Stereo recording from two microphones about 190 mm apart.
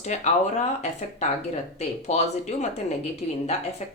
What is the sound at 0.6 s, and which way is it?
Speech, 35° left (ahead or behind).